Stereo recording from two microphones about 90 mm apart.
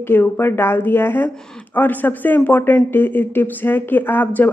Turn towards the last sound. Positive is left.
turn(degrees=20)  # may be behind; listen again after turning